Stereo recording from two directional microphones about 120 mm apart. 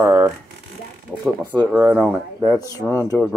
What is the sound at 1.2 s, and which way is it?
Speech, 15° right (ahead or behind).